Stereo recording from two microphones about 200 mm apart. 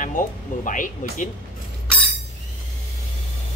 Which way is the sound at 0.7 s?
40° left (ahead or behind).